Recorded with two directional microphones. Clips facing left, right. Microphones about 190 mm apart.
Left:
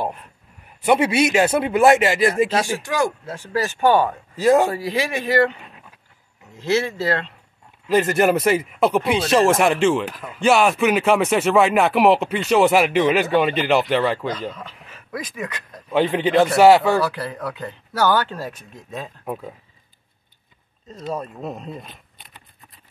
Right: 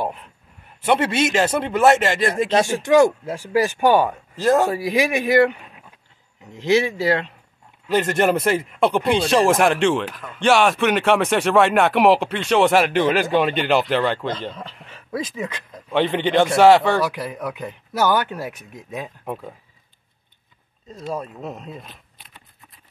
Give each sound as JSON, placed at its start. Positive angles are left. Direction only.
{"t": 0.8, "sound": "speech", "side_deg": 5}
{"t": 2.5, "sound": "speech", "side_deg": -20}
{"t": 4.4, "sound": "speech", "side_deg": 5}
{"t": 4.6, "sound": "speech", "side_deg": -15}
{"t": 7.9, "sound": "speech", "side_deg": 5}
{"t": 14.5, "sound": "speech", "side_deg": -30}
{"t": 14.9, "sound": "a sound", "side_deg": -30}
{"t": 15.3, "sound": "speech", "side_deg": -20}
{"t": 15.9, "sound": "speech", "side_deg": 5}
{"t": 17.0, "sound": "speech", "side_deg": -15}
{"t": 19.2, "sound": "speech", "side_deg": 0}
{"t": 20.9, "sound": "speech", "side_deg": 0}
{"t": 21.3, "sound": "a sound", "side_deg": 0}